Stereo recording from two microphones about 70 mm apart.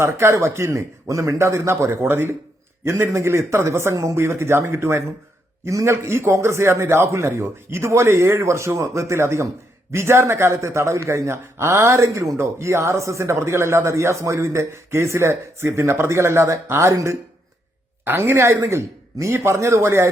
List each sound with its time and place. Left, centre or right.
0.0 s speech: right
3.1 s speech: right
18.3 s speech: right